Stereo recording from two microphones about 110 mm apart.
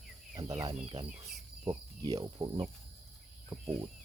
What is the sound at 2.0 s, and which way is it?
Speech, 35° right (ahead or behind).